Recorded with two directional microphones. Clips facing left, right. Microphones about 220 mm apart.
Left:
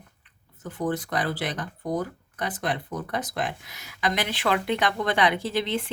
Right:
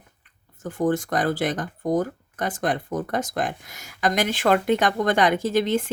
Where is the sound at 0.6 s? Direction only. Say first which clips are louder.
Right 5 dB; 45° right (ahead or behind).